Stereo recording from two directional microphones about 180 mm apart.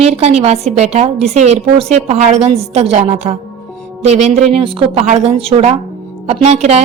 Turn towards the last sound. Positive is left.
turn(degrees=-35)  # may be behind; listen again after turning